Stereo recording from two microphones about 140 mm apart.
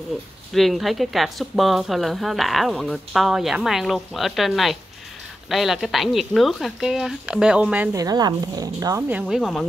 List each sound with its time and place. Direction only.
0.5 s a woman's voice: centre (ahead or behind)
7.9 s speech: 25° right (ahead or behind)
9.1 s a woman's voice: 5° right (ahead or behind)